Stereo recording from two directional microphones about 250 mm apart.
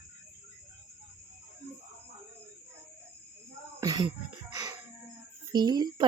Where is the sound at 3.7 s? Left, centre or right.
Centre.